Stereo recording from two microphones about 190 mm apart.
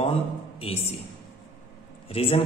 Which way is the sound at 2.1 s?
30° left (ahead or behind).